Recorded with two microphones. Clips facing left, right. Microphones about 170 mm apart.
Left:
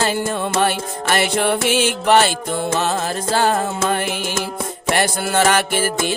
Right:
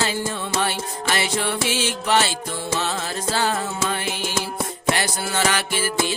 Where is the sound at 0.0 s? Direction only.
50° left (ahead or behind).